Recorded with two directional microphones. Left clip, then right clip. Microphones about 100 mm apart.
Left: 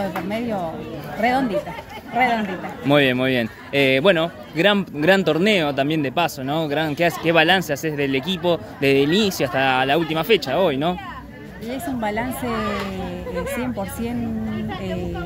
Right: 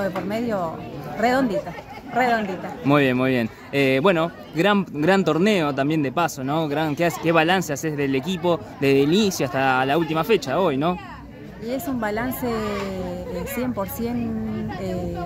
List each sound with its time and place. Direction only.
1.2 s speech: 45° right (ahead or behind)
2.8 s a man's voice: 25° right (ahead or behind)
12.0 s a woman's voice: 35° right (ahead or behind)